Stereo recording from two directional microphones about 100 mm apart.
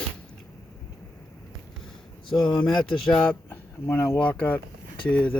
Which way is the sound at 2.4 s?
50° left (ahead or behind).